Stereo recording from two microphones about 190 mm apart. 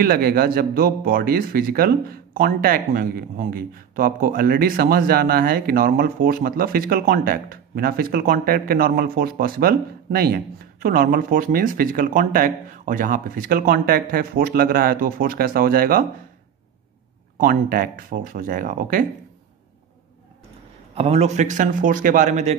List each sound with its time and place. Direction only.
0.0 s speech: 50° right (ahead or behind)
17.4 s speech: 50° right (ahead or behind)
20.9 s a man's voice: 35° right (ahead or behind)